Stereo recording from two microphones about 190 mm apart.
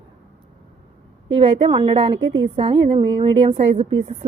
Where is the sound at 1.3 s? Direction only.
30° right (ahead or behind).